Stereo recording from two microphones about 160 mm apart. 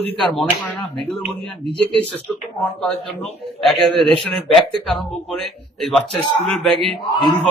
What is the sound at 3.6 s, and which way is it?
Speech, centre (ahead or behind).